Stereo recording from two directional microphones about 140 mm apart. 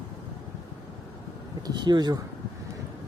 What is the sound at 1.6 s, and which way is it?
Speech, 30° right (ahead or behind).